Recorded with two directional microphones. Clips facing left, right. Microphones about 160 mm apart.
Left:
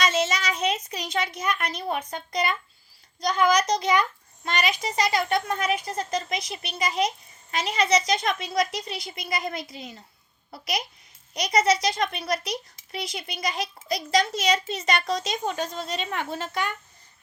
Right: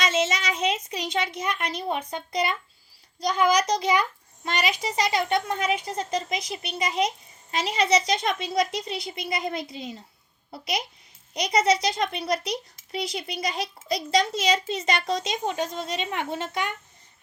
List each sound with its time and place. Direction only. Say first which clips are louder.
0.0 s a child's voice: even; 25° right (ahead or behind)